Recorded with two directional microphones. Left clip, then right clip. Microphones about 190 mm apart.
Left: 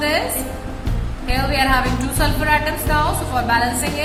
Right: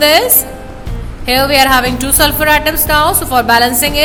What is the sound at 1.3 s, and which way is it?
A woman's voice, 55° right (ahead or behind).